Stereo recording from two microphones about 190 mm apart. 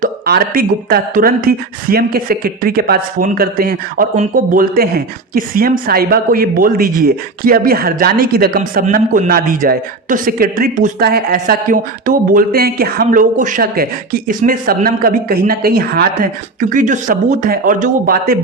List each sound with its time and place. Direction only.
0.0 s speech: 50° right (ahead or behind)